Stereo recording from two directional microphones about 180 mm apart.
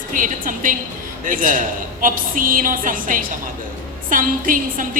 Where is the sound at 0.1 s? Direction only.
50° right (ahead or behind).